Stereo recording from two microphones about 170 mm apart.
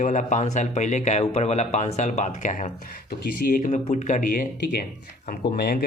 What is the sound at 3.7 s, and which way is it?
Speech, 40° left (ahead or behind).